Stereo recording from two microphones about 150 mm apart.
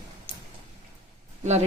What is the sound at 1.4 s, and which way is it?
Speech, 50° right (ahead or behind).